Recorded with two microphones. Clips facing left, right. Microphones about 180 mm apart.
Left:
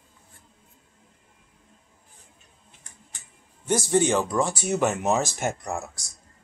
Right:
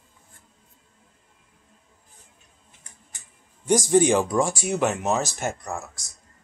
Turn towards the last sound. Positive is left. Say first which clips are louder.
# left 1 dB
turn(degrees=15)  # may be behind; listen again after turning